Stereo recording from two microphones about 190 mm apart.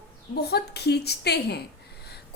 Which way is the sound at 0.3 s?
60° left (ahead or behind).